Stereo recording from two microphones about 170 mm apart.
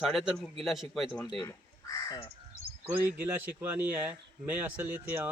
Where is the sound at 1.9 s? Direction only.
20° left (ahead or behind).